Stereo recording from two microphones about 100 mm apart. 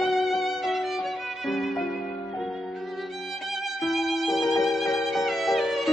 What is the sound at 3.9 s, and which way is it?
Violin, centre (ahead or behind).